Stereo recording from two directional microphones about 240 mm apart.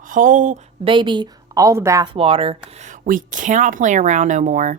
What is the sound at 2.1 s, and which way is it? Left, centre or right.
Speech, right.